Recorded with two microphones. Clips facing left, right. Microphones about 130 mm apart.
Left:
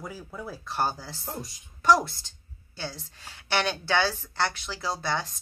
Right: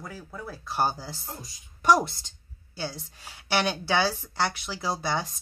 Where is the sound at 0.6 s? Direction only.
10° right (ahead or behind).